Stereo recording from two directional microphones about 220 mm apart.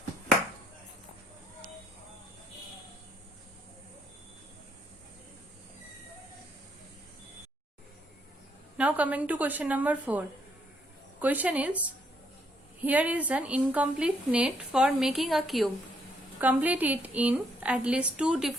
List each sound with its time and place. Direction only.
8.8 s a woman's voice: 5° right (ahead or behind)
12.8 s a woman's voice: 5° right (ahead or behind)